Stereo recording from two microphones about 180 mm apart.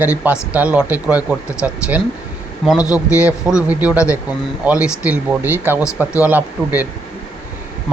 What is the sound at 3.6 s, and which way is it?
A man's voice, 10° right (ahead or behind).